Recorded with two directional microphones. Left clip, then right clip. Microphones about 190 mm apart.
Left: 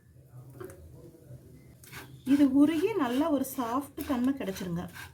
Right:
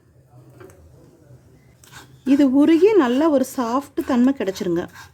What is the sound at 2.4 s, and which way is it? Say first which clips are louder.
A woman's voice: right 11 dB; 45° right (ahead or behind).